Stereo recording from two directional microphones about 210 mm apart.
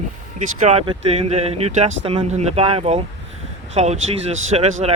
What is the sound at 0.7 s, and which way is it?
Speech, 30° right (ahead or behind).